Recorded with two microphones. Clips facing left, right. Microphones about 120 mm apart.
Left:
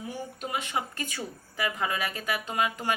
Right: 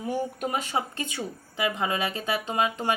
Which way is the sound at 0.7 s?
25° right (ahead or behind).